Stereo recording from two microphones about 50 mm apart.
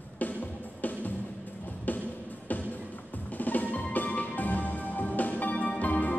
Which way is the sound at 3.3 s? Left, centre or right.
Left.